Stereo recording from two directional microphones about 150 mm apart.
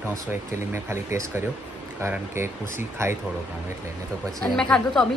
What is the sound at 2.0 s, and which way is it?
Speech, 15° right (ahead or behind).